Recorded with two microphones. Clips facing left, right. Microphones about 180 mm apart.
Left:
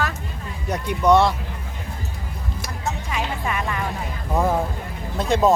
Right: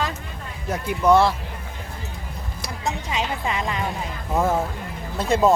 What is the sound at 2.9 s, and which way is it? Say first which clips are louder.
Music: right 1 dB; 20° right (ahead or behind).